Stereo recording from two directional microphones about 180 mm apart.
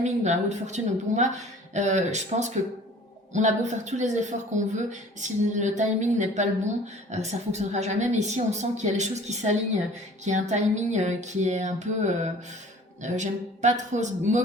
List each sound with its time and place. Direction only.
0.0 s speech: 40° right (ahead or behind)